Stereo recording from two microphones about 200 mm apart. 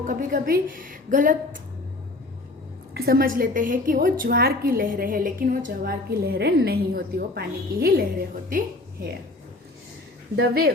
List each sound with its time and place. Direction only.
0.0 s a woman's voice: 40° right (ahead or behind)
2.9 s a woman's voice: 50° right (ahead or behind)
10.3 s a woman's voice: 50° right (ahead or behind)